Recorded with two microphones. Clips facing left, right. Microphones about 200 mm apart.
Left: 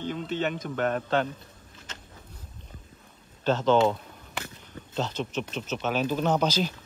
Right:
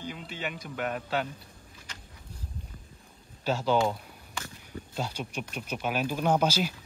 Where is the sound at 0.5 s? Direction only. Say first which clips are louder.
Left 1 dB; 45° left (ahead or behind).